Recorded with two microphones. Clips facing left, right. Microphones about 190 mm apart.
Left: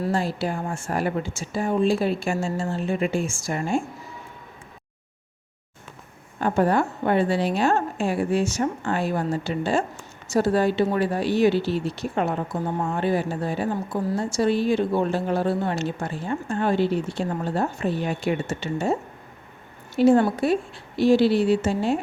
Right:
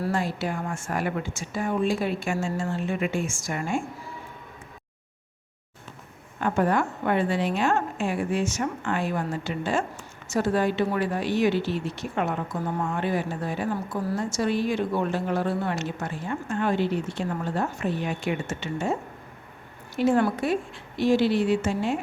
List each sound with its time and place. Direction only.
0.1 s a woman's voice: 30° left (ahead or behind)
6.4 s a woman's voice: 30° left (ahead or behind)
20.0 s a woman's voice: 30° left (ahead or behind)